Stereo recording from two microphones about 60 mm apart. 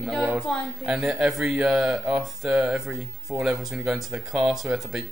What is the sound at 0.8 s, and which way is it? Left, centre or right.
Speech, centre.